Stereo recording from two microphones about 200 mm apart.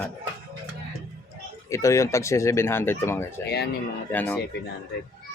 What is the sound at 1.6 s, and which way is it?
Speech, 15° left (ahead or behind).